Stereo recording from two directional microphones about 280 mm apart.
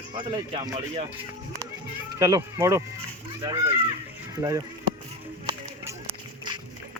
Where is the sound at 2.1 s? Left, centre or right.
Centre.